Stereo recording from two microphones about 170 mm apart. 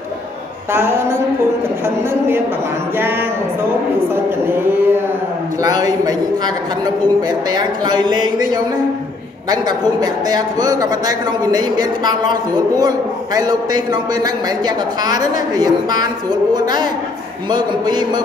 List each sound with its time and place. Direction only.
0.7 s speech: 15° right (ahead or behind)
3.0 s a man's voice: 15° right (ahead or behind)